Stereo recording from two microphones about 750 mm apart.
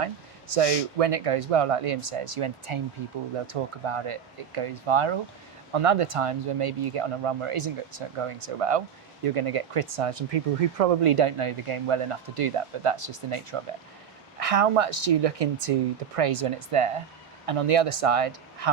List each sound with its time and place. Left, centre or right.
0.0 s speech: right